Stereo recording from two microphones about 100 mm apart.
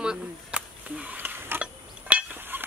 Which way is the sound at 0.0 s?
10° right (ahead or behind).